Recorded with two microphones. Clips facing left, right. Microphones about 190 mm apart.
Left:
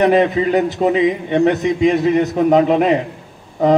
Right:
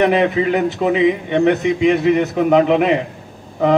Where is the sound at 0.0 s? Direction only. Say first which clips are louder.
Left 1 dB; 40° left (ahead or behind).